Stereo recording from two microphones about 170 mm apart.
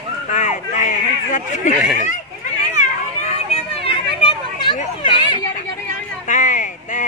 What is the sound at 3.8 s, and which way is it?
Chatter, 30° left (ahead or behind).